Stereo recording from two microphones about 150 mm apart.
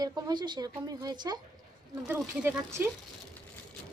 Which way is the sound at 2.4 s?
15° right (ahead or behind).